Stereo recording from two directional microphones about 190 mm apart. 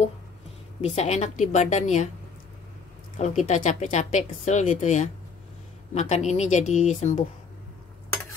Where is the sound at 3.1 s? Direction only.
40° left (ahead or behind).